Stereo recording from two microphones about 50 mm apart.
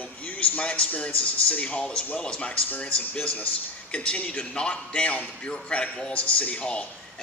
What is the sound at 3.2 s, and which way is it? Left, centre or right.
A man's voice, left.